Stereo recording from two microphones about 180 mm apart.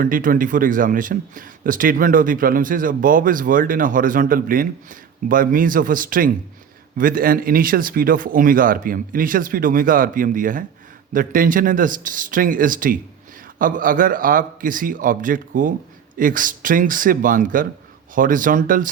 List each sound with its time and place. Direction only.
0.0 s a man's voice: 50° right (ahead or behind)